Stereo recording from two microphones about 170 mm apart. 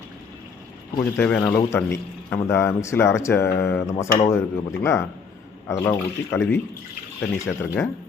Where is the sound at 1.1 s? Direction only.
10° left (ahead or behind).